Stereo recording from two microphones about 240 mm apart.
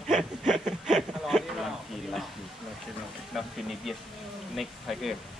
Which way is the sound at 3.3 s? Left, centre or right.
Centre.